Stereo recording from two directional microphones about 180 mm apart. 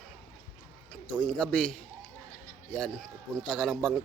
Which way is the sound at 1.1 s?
5° left (ahead or behind).